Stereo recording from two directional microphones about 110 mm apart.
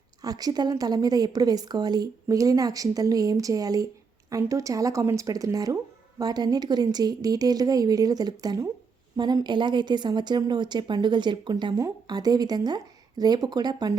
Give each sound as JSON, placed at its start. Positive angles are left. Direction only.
{"t": 0.2, "sound": "a woman's voice", "side_deg": -35}